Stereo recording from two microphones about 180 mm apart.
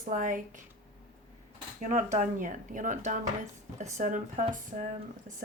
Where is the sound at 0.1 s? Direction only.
45° right (ahead or behind).